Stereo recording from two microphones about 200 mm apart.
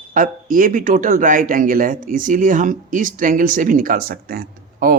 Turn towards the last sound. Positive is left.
turn(degrees=-50)  # may be behind; listen again after turning